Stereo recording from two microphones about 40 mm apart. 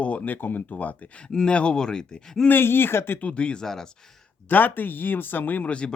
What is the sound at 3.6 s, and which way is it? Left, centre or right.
Speech, centre.